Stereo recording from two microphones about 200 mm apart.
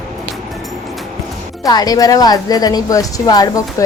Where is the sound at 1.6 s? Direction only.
20° left (ahead or behind).